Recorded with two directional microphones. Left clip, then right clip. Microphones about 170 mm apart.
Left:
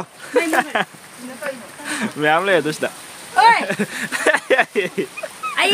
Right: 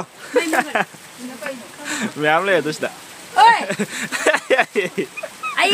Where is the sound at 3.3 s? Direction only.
20° right (ahead or behind).